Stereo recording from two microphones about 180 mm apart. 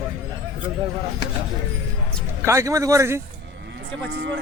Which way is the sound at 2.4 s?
15° right (ahead or behind).